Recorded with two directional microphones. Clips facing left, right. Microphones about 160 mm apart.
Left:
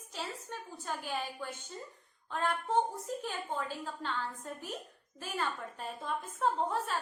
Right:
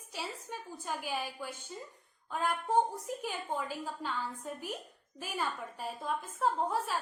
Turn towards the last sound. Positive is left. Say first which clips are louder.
# even
turn(degrees=-5)  # may be behind; listen again after turning